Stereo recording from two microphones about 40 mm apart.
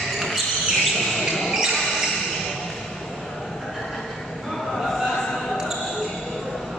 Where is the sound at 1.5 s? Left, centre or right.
Centre.